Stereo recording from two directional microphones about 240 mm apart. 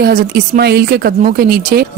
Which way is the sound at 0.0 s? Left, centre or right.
Right.